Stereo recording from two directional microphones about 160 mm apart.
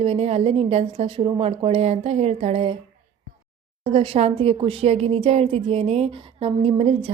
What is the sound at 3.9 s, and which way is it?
Speech, 40° right (ahead or behind).